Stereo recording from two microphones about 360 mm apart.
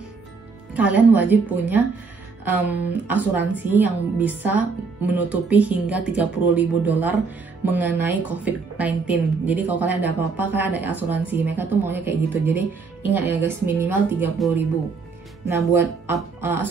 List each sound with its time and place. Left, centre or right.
0.7 s a woman's voice: centre